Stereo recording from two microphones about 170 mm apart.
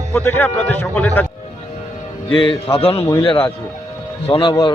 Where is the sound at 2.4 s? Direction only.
30° left (ahead or behind).